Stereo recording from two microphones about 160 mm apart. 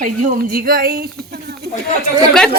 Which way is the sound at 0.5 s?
70° right (ahead or behind).